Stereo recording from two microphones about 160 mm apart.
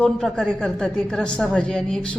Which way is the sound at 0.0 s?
5° left (ahead or behind).